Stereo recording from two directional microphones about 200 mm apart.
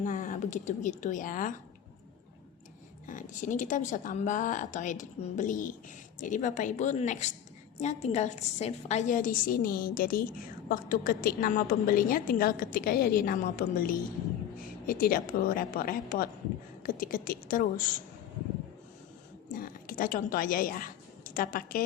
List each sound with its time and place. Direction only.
0.0 s a woman's voice: 40° left (ahead or behind)
3.1 s a woman's voice: 40° left (ahead or behind)
19.5 s a woman's voice: 45° left (ahead or behind)